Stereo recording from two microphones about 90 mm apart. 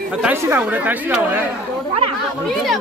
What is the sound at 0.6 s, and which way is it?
Speech, 15° right (ahead or behind).